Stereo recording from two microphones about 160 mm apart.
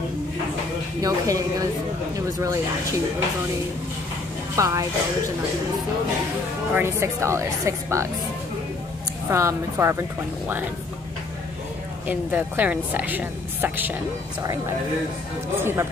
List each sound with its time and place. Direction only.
1.0 s speech: 20° right (ahead or behind)
4.6 s speech: 20° right (ahead or behind)
6.7 s a woman's voice: 15° right (ahead or behind)
9.3 s a woman's voice: 20° right (ahead or behind)
12.1 s a woman's voice: 10° right (ahead or behind)
15.5 s a woman's voice: 15° right (ahead or behind)